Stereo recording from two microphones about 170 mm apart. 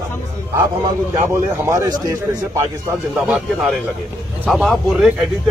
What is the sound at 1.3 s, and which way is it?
A man's voice, 15° right (ahead or behind).